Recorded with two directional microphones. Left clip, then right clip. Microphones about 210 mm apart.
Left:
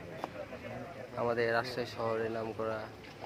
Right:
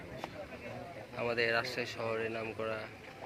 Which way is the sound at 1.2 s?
15° left (ahead or behind).